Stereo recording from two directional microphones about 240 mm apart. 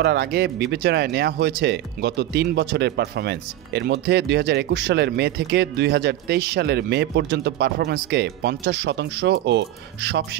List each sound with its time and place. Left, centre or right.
0.0 s speech: right